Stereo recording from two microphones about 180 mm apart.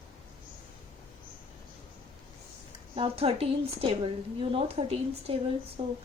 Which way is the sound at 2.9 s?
30° right (ahead or behind).